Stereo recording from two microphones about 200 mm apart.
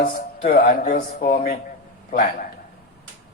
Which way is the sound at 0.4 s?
45° left (ahead or behind).